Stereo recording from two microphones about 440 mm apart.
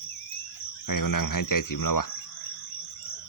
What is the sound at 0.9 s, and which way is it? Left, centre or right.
Cricket, left.